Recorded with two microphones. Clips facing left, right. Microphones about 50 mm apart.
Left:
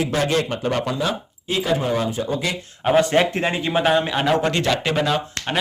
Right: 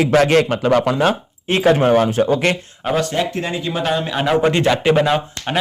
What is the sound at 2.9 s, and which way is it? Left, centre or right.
Speech, left.